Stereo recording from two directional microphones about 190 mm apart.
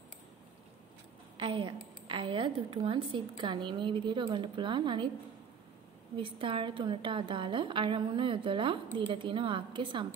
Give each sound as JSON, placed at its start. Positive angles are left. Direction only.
{"t": 1.4, "sound": "a woman's voice", "side_deg": -25}
{"t": 6.1, "sound": "a woman's voice", "side_deg": -25}